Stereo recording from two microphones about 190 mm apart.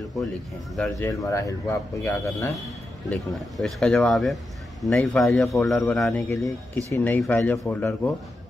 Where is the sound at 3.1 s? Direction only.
Centre (ahead or behind).